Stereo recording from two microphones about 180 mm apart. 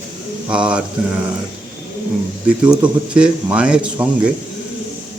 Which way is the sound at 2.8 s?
5° right (ahead or behind).